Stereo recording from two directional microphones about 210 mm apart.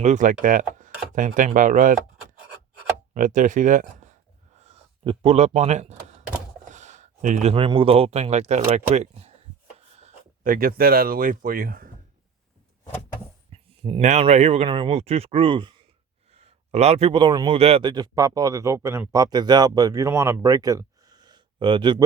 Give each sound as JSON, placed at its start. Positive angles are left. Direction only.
{"t": 0.0, "sound": "speech", "side_deg": -35}
{"t": 0.4, "sound": "a sound", "side_deg": -40}
{"t": 1.1, "sound": "speech", "side_deg": -40}
{"t": 3.2, "sound": "speech", "side_deg": -40}
{"t": 4.5, "sound": "a sound", "side_deg": -30}
{"t": 7.5, "sound": "speech", "side_deg": -25}
{"t": 13.5, "sound": "a man's voice", "side_deg": -25}